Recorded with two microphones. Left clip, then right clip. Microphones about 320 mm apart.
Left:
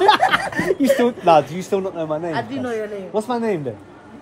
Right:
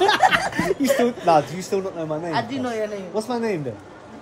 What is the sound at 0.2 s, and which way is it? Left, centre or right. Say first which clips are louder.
Snicker: even; centre.